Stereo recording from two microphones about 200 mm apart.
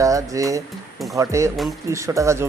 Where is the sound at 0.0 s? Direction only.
15° right (ahead or behind).